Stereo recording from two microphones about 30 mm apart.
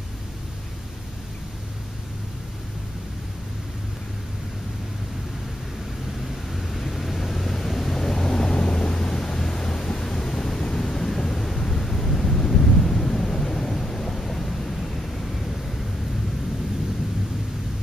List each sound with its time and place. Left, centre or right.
6.5 s vehicle: centre
8.0 s vehicle: centre
8.5 s thunder: left; by 15.0 s centre